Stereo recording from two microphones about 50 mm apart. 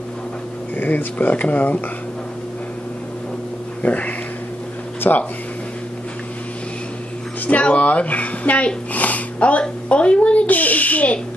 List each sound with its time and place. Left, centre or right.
0.7 s speech: left
1.1 s speech: left
3.8 s speech: left
7.4 s speech: left